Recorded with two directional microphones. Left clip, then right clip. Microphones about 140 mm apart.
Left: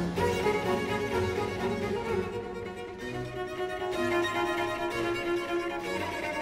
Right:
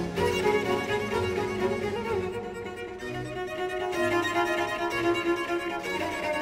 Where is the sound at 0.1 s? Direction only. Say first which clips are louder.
Right 3 dB; 30° right (ahead or behind).